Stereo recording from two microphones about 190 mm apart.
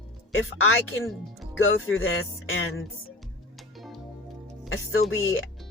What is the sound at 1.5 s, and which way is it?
A woman's voice, 90° left.